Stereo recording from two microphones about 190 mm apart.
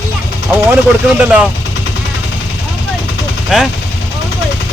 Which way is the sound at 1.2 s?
5° right (ahead or behind).